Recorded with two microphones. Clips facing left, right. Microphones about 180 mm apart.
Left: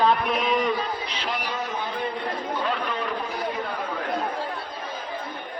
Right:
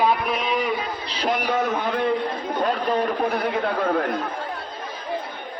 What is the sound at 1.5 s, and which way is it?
Speech, 65° right (ahead or behind).